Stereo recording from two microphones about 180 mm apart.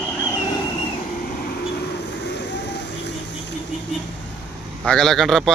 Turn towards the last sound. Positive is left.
turn(degrees=0)  # may be behind; listen again after turning